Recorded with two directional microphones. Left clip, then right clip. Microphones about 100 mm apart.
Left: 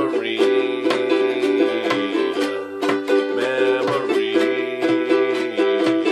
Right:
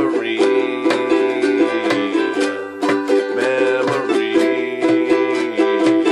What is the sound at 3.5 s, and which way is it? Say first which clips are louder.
Music: right 2 dB; 25° left (ahead or behind).